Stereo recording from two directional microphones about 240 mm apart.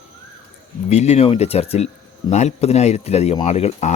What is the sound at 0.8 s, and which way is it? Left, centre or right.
Speech, left.